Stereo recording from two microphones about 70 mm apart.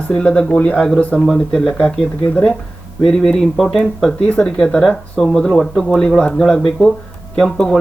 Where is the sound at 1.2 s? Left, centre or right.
Centre.